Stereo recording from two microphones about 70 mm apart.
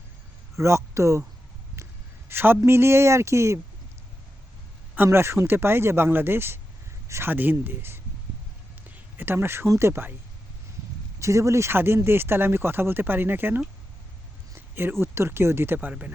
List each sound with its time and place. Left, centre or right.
0.5 s speech: right
2.3 s speech: right
5.0 s speech: right
9.1 s speech: right
11.2 s speech: right